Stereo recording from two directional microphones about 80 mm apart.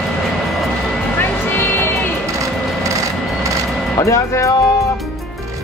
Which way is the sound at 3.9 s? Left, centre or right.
Left.